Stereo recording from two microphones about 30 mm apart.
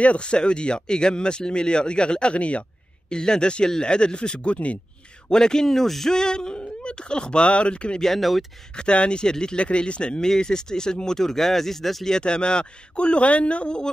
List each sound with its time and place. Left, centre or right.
0.0 s speech: left
3.1 s speech: left
5.3 s a man's voice: left
5.7 s speech: centre
6.1 s speech: left
8.2 s speech: centre
8.7 s speech: left
9.6 s speech: left
10.2 s speech: left
12.1 s speech: left